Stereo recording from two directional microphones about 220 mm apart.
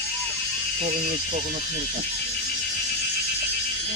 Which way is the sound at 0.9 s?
40° right (ahead or behind).